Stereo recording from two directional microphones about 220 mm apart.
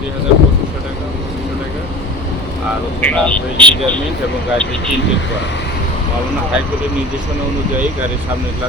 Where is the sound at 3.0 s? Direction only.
5° left (ahead or behind).